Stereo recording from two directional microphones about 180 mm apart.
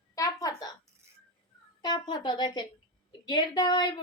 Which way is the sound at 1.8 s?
25° left (ahead or behind).